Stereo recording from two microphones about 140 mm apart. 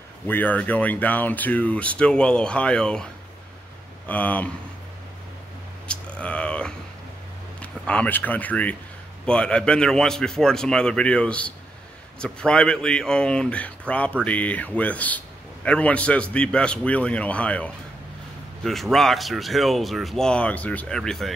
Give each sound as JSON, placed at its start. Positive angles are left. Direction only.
{"t": 0.3, "sound": "speech", "side_deg": 10}
{"t": 4.1, "sound": "speech", "side_deg": 10}
{"t": 5.9, "sound": "a sound", "side_deg": 10}
{"t": 7.6, "sound": "speech", "side_deg": 10}